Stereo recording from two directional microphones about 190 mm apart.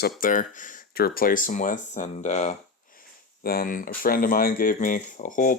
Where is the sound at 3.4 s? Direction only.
50° left (ahead or behind).